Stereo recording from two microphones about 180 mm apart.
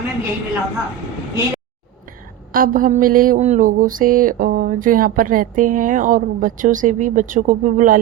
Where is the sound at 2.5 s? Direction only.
50° right (ahead or behind).